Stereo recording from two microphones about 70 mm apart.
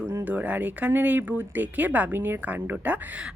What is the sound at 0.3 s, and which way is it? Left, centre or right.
Speech, right.